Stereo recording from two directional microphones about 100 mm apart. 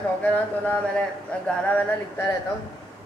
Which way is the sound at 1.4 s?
15° left (ahead or behind).